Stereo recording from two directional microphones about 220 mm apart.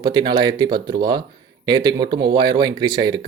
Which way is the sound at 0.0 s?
20° right (ahead or behind).